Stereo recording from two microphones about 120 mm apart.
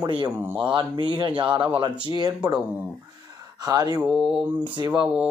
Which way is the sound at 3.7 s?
30° right (ahead or behind).